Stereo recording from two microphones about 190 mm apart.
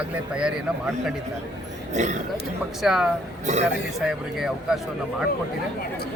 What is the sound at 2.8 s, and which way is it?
Speech, centre (ahead or behind).